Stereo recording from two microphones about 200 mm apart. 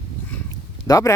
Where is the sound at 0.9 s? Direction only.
15° left (ahead or behind).